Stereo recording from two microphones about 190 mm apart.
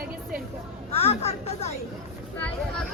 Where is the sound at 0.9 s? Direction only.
35° left (ahead or behind).